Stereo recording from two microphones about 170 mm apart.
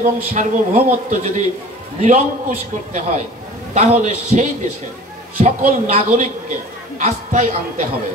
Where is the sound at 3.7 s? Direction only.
40° right (ahead or behind).